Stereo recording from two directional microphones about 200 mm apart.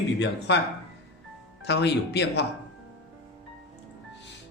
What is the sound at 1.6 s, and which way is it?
Speech, 55° left (ahead or behind).